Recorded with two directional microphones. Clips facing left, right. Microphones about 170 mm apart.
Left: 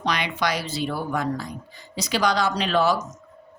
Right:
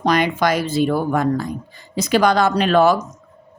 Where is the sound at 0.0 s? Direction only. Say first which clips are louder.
Right 8 dB; 45° right (ahead or behind).